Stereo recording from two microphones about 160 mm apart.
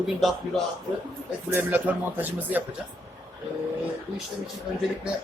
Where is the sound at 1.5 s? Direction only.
10° right (ahead or behind).